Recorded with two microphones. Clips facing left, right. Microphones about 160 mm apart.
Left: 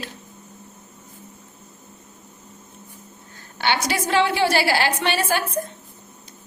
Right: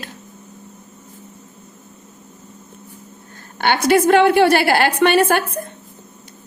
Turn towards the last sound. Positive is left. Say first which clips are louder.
# right 7 dB
turn(degrees=-55)  # may be behind; listen again after turning